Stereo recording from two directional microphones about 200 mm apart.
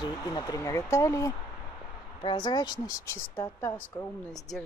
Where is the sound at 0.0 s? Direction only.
20° left (ahead or behind).